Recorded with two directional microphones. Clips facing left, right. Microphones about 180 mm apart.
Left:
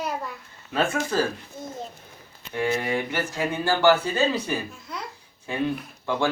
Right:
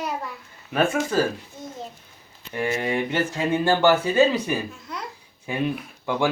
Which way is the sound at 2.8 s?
20° right (ahead or behind).